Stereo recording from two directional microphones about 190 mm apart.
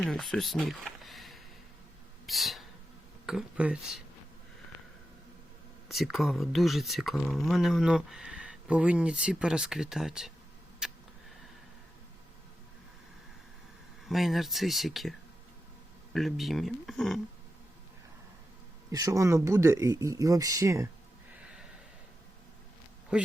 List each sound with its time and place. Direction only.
0.0 s speech: 5° left (ahead or behind)
2.2 s a sound: centre (ahead or behind)
3.2 s speech: 5° right (ahead or behind)
5.9 s speech: centre (ahead or behind)
10.8 s a sound: 5° right (ahead or behind)
14.1 s speech: centre (ahead or behind)
16.1 s speech: centre (ahead or behind)
18.9 s speech: 20° right (ahead or behind)
21.4 s snort: 5° right (ahead or behind)
23.1 s speech: 5° right (ahead or behind)